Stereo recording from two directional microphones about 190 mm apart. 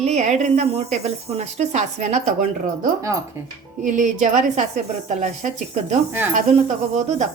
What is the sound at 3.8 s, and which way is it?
A woman's voice, 40° right (ahead or behind).